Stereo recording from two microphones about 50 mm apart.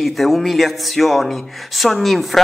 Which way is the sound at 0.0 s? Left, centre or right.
Centre.